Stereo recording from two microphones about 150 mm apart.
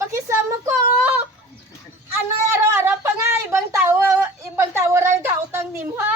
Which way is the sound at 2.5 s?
15° right (ahead or behind).